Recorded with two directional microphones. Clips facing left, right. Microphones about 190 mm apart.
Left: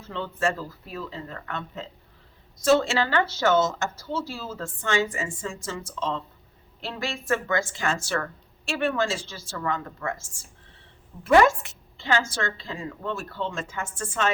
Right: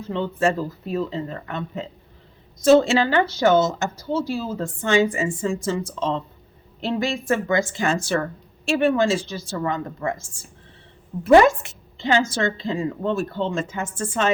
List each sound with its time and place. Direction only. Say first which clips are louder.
0.0 s a woman's voice: right 6 dB; 15° right (ahead or behind)